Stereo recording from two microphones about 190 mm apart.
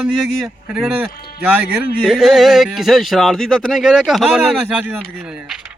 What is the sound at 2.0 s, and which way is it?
Speech, centre (ahead or behind).